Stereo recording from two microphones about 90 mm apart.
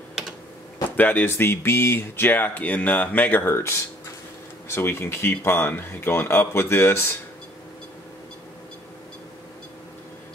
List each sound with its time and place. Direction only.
0.9 s speech: 20° left (ahead or behind)